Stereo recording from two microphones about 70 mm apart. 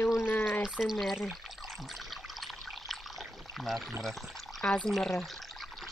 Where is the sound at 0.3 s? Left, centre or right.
Left.